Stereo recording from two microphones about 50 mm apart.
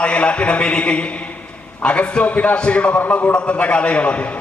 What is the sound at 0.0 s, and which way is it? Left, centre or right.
A man's voice, left.